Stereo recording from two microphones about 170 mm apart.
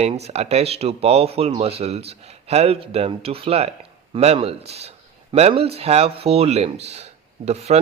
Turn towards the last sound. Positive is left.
turn(degrees=-40)  # may be behind; listen again after turning